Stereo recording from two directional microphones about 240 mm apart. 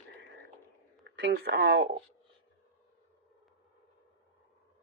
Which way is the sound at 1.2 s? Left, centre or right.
Right.